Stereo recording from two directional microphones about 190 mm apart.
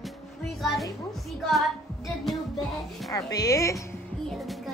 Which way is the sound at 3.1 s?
20° left (ahead or behind).